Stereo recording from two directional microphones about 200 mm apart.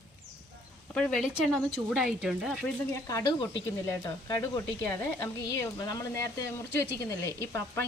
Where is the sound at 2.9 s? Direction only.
15° left (ahead or behind).